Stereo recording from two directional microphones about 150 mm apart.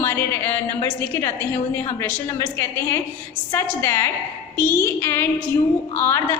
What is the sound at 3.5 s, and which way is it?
A woman's voice, 15° left (ahead or behind).